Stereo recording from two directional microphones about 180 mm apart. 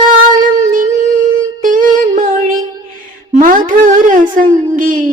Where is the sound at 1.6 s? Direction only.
50° right (ahead or behind).